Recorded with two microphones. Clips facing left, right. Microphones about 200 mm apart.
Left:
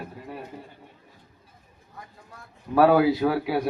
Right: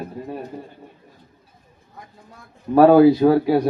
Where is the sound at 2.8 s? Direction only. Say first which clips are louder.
Right 7 dB; 25° right (ahead or behind).